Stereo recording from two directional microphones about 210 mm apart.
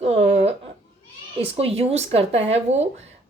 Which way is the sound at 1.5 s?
30° right (ahead or behind).